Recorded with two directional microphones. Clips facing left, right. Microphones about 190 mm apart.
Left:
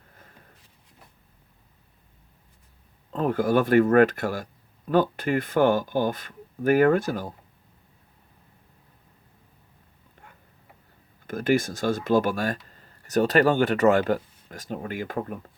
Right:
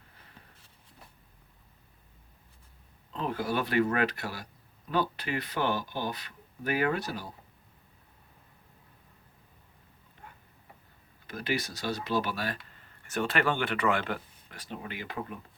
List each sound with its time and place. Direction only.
3.1 s speech: 50° left (ahead or behind)
11.3 s speech: 50° left (ahead or behind)